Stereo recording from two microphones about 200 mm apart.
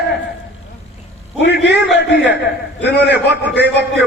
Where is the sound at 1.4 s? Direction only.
55° left (ahead or behind).